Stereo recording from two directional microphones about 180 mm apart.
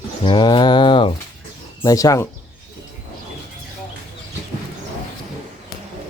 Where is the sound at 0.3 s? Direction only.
25° left (ahead or behind).